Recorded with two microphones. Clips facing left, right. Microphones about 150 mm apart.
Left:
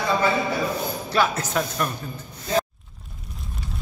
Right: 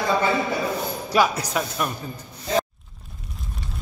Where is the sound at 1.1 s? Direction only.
10° right (ahead or behind).